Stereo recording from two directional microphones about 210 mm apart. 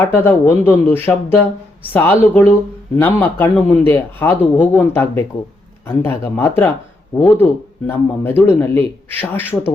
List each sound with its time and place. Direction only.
0.0 s speech: 10° left (ahead or behind)